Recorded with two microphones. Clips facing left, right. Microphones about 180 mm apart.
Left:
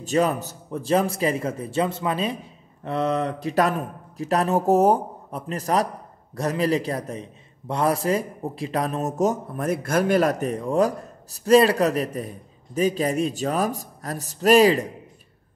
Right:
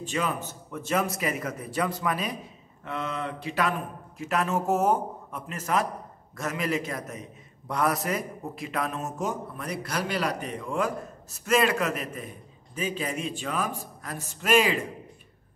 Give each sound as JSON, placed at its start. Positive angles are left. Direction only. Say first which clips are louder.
{"t": 0.0, "sound": "a man's voice", "louder": "left 8 dB", "side_deg": 40}
{"t": 2.8, "sound": "a man's voice", "louder": "left 9 dB", "side_deg": 35}